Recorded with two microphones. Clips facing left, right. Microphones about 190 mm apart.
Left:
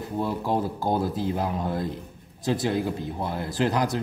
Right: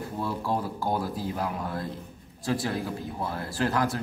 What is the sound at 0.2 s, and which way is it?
A man's voice, 20° left (ahead or behind).